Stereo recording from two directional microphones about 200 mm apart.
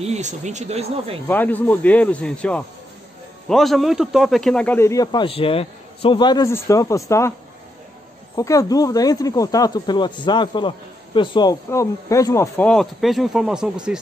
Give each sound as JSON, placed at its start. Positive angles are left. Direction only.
{"t": 0.0, "sound": "speech", "side_deg": -35}
{"t": 1.2, "sound": "a man's voice", "side_deg": 10}
{"t": 8.4, "sound": "speech", "side_deg": 15}